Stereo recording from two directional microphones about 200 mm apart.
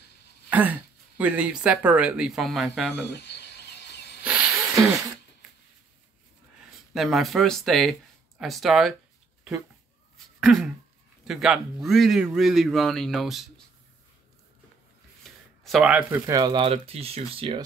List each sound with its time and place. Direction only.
0.5 s speech: 10° right (ahead or behind)
3.1 s a sound: 55° left (ahead or behind)
4.2 s snake: 5° right (ahead or behind)
6.9 s a man's voice: centre (ahead or behind)
10.1 s a sound: centre (ahead or behind)
11.2 s a man's voice: centre (ahead or behind)
15.2 s speech: centre (ahead or behind); by 17.6 s 25° right (ahead or behind)